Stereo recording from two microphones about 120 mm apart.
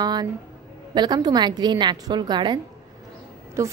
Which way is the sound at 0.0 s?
35° right (ahead or behind).